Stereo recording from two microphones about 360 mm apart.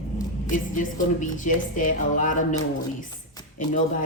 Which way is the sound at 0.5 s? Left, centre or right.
Left.